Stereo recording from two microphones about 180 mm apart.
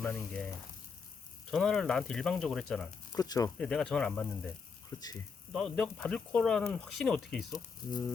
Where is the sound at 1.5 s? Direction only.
Centre (ahead or behind).